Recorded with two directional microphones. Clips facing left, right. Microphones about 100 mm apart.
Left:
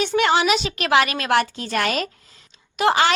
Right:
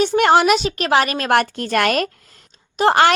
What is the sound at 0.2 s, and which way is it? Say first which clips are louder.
A woman's voice: right 4 dB; 50° right (ahead or behind).